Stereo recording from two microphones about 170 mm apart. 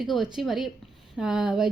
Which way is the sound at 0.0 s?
Centre (ahead or behind).